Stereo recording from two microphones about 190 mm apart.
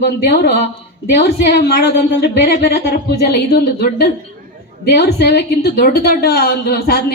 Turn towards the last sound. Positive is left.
turn(degrees=55)  # may be behind; listen again after turning